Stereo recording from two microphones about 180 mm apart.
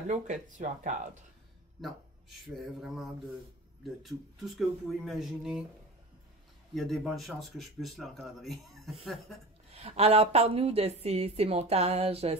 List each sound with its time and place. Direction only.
0.1 s a woman's voice: 40° right (ahead or behind)
1.8 s speech: centre (ahead or behind)
6.7 s speech: centre (ahead or behind)
9.7 s a woman's voice: 35° right (ahead or behind)